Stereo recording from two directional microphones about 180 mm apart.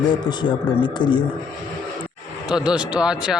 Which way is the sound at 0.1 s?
25° left (ahead or behind).